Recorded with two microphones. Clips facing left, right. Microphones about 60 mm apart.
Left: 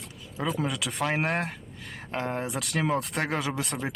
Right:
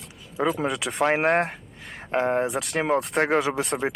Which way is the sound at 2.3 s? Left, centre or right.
Centre.